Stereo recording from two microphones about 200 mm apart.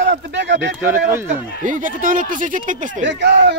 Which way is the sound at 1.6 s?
40° right (ahead or behind).